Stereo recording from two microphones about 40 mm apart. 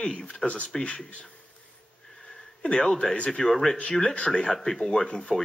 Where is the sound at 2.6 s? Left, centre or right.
Centre.